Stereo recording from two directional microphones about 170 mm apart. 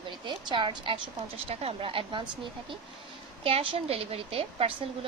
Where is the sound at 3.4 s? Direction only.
35° right (ahead or behind).